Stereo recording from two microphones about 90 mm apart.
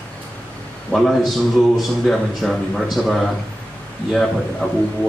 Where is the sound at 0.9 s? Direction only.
Centre (ahead or behind).